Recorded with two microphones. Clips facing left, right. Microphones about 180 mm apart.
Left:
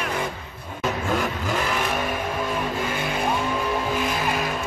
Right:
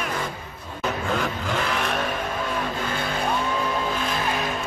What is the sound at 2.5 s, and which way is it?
Guitar, 10° left (ahead or behind).